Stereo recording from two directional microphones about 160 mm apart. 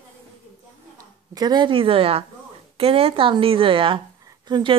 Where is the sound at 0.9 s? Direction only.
25° right (ahead or behind).